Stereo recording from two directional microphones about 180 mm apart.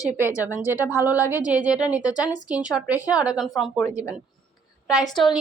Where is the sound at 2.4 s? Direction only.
5° right (ahead or behind).